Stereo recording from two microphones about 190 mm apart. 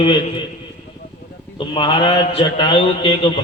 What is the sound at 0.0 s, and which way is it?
Speech, 25° left (ahead or behind).